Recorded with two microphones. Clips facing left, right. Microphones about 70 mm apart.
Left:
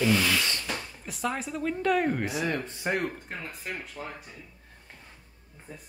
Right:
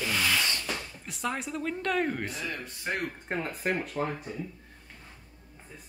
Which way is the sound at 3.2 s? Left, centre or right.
Right.